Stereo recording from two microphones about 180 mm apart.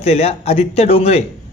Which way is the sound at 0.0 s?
35° left (ahead or behind).